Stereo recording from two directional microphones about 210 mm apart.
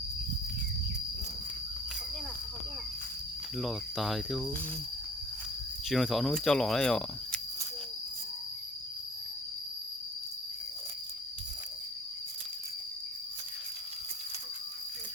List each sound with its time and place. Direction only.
3.6 s speech: centre (ahead or behind)
5.9 s speech: centre (ahead or behind)